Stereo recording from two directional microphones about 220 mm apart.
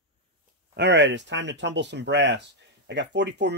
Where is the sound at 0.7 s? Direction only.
50° right (ahead or behind).